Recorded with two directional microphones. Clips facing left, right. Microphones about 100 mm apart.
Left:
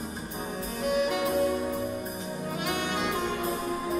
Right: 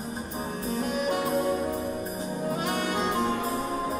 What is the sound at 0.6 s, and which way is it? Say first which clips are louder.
Music: left 1 dB; 40° right (ahead or behind).